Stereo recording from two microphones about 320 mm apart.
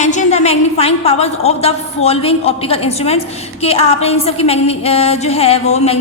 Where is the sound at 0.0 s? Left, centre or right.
Left.